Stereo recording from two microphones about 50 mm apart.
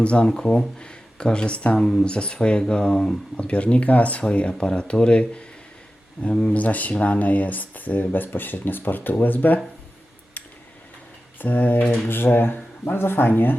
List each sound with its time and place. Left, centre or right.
0.0 s speech: left
1.8 s speech: centre
3.3 s speech: left
11.3 s speech: left